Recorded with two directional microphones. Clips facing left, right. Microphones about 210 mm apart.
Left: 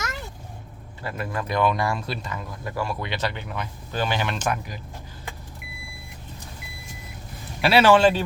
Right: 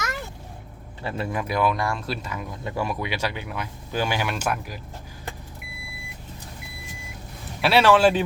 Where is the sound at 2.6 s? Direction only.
20° right (ahead or behind).